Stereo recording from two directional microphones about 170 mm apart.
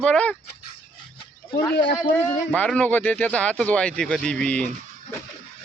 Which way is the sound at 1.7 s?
90° left.